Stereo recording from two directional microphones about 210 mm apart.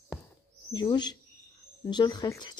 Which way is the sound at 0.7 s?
20° left (ahead or behind).